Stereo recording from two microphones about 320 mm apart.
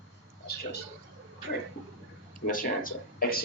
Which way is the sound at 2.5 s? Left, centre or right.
Left.